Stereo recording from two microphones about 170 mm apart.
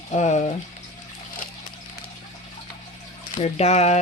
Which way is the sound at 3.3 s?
40° left (ahead or behind).